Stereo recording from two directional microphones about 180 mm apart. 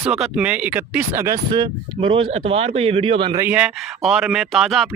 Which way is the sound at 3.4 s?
10° right (ahead or behind).